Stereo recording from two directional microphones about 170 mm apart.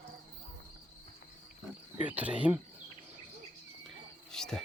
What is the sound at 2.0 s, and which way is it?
Speech, 10° right (ahead or behind).